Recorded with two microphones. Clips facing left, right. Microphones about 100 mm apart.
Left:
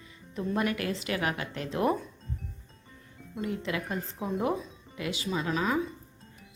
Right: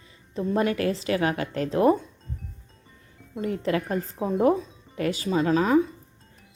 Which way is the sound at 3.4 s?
40° right (ahead or behind).